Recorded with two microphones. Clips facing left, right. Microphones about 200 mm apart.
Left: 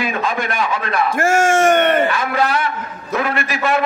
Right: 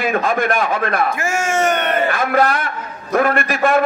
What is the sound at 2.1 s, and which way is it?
A man's voice, 50° right (ahead or behind).